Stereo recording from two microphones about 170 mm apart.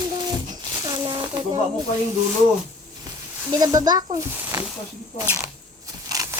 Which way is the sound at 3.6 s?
20° right (ahead or behind).